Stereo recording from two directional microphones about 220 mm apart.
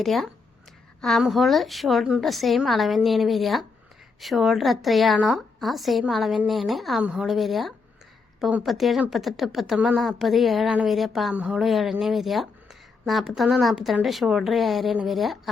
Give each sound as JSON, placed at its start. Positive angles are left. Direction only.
{"t": 0.0, "sound": "speech", "side_deg": 0}